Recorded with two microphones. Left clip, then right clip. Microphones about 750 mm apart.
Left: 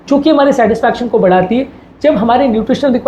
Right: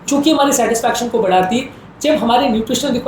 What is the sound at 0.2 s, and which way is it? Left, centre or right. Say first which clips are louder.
A woman's voice: left 4 dB; left.